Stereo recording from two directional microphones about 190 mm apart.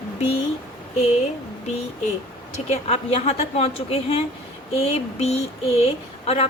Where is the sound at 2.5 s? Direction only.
35° left (ahead or behind).